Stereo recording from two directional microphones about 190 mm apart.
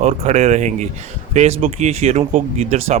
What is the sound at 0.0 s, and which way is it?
Speech, 35° right (ahead or behind).